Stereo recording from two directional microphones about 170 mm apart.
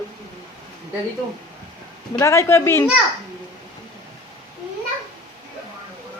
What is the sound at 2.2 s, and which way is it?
Speech, 15° left (ahead or behind).